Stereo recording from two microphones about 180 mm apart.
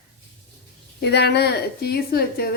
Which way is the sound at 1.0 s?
65° left (ahead or behind).